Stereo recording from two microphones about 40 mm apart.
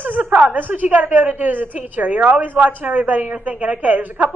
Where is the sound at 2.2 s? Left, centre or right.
Right.